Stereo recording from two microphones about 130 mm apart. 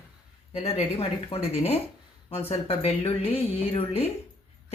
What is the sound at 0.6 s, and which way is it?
Speech, 50° left (ahead or behind).